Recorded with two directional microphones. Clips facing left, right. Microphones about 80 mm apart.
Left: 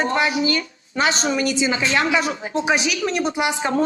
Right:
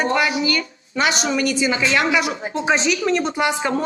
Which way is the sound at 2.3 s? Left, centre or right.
Right.